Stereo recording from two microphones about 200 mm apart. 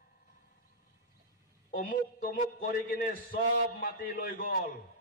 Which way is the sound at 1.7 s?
45° left (ahead or behind).